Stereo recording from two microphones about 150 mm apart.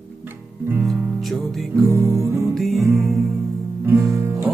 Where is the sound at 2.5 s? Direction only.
Centre (ahead or behind).